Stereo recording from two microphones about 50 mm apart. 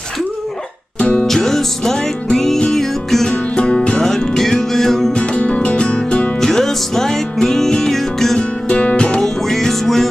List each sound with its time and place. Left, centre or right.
0.9 s music: centre
1.2 s music: centre
3.5 s music: centre
5.1 s music: left
6.4 s music: centre
8.4 s music: left
9.5 s music: centre